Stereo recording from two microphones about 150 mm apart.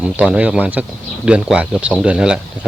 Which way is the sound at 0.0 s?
10° right (ahead or behind).